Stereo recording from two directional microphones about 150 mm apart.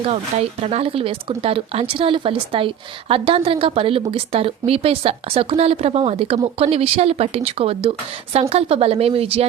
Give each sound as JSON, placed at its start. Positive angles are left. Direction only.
{"t": 0.0, "sound": "speech", "side_deg": -40}